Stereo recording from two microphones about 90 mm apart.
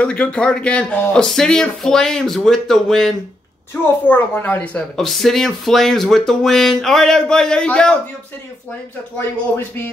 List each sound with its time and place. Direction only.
0.0 s speech: 15° left (ahead or behind)
3.8 s a woman's voice: 20° left (ahead or behind)
4.9 s speech: 5° left (ahead or behind)